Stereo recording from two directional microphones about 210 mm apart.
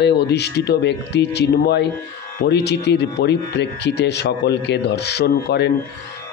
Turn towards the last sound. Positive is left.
turn(degrees=50)  # may be behind; listen again after turning